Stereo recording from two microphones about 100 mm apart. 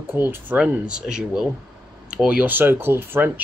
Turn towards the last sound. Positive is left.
turn(degrees=-20)  # may be behind; listen again after turning